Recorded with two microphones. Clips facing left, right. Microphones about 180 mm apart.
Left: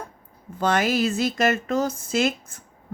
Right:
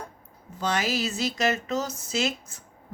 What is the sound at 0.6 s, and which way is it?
Speech, 55° left (ahead or behind).